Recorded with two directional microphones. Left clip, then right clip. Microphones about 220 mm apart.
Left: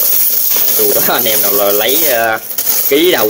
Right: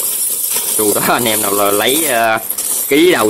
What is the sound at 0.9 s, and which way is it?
Speech, 20° right (ahead or behind).